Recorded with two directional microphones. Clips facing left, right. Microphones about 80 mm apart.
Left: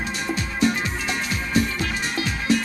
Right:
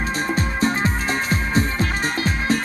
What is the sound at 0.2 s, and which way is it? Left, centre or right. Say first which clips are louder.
Music: right 1 dB; right.